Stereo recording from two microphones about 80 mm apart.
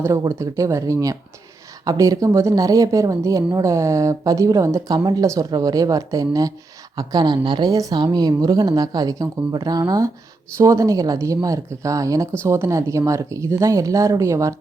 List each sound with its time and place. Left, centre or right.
0.0 s a woman's voice: right
5.5 s a woman's voice: right
6.9 s speech: right
7.7 s a woman's voice: right
10.6 s a woman's voice: right
12.4 s speech: right